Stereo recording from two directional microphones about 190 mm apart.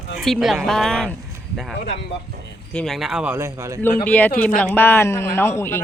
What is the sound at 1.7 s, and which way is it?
Speech, 60° left (ahead or behind).